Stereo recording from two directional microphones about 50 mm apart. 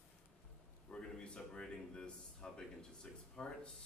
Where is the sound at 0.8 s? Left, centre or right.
Centre.